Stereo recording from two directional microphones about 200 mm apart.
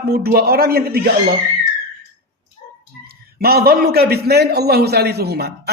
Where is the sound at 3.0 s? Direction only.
50° right (ahead or behind).